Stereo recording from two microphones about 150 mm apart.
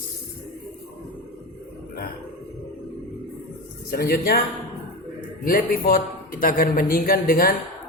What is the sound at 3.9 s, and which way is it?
Speech, 90° left.